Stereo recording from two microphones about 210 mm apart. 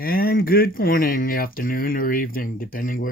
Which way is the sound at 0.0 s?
45° left (ahead or behind).